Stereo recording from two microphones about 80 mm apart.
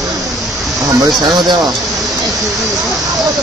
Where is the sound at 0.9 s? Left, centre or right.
Right.